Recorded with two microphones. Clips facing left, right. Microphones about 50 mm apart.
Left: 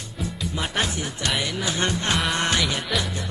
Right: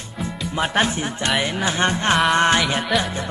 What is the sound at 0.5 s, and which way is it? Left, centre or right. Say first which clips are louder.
Music: right 7 dB; right.